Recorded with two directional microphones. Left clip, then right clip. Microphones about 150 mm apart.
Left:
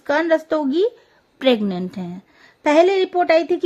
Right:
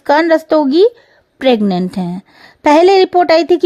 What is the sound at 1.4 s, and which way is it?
Speech, 45° right (ahead or behind).